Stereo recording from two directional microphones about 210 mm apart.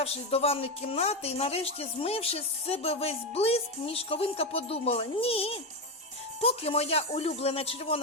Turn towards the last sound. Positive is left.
turn(degrees=25)  # may be behind; listen again after turning